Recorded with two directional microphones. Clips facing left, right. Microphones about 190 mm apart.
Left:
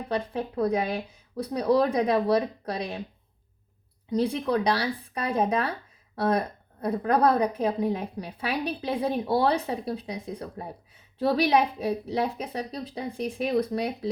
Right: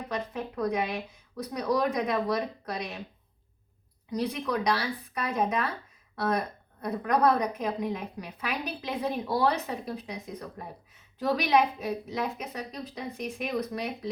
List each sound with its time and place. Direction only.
0.1 s a woman's voice: 30° left (ahead or behind)
4.1 s a woman's voice: 30° left (ahead or behind)